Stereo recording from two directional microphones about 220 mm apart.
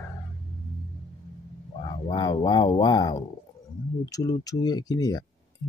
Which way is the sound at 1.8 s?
20° left (ahead or behind).